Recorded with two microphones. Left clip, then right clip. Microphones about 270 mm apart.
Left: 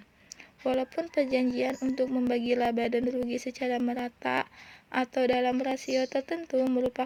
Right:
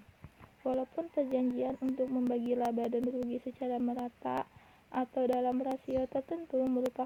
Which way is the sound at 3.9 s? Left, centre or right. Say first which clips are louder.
Left 6 dB; centre.